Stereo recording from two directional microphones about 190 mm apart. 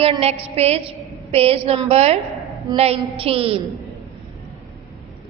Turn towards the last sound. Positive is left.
turn(degrees=-30)  # may be behind; listen again after turning